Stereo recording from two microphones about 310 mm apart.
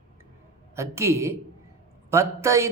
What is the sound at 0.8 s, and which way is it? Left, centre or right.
Speech, centre.